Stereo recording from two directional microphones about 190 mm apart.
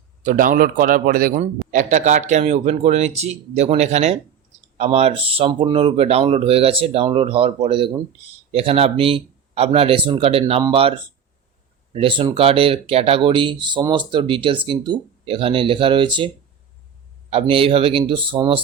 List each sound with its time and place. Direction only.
0.2 s a man's voice: 45° right (ahead or behind); by 16.3 s 25° right (ahead or behind)
17.5 s speech: 30° right (ahead or behind)